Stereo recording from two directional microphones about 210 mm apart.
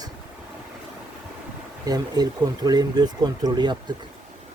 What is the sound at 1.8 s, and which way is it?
Speech, 20° right (ahead or behind).